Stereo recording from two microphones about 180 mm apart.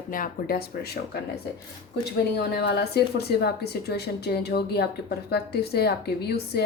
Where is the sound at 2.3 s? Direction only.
65° left (ahead or behind).